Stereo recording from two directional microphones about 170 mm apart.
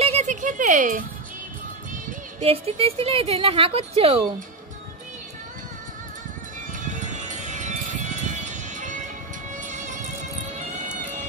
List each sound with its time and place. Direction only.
0.0 s a sound: 40° right (ahead or behind)
2.4 s speech: 35° right (ahead or behind)
6.7 s music: 45° right (ahead or behind)